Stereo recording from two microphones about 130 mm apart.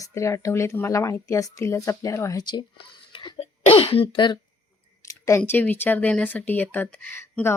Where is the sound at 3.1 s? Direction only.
45° left (ahead or behind).